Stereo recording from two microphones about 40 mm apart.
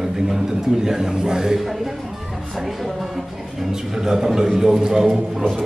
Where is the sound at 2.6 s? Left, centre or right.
Centre.